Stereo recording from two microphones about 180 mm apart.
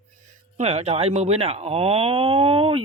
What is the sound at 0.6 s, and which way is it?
Speech, 35° right (ahead or behind).